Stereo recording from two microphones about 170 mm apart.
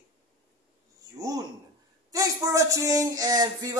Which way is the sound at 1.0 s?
20° right (ahead or behind).